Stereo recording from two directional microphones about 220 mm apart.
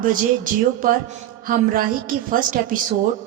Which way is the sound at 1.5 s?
40° right (ahead or behind).